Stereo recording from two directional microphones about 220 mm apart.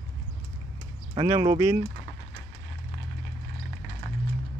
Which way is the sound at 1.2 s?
20° right (ahead or behind).